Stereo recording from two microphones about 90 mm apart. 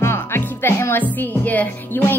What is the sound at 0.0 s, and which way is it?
Speech, 25° left (ahead or behind).